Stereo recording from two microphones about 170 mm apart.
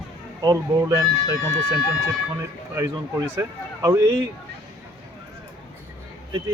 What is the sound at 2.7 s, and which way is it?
Speech, 20° right (ahead or behind).